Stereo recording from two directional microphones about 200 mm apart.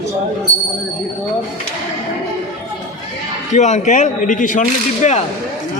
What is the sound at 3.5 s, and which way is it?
Speech, 35° left (ahead or behind).